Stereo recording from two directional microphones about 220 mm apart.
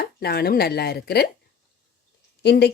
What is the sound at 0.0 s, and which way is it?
Speech, 45° left (ahead or behind).